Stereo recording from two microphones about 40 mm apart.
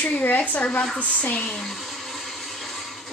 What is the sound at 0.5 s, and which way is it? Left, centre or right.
Speech, left.